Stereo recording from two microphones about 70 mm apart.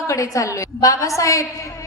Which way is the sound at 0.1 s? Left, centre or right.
Left.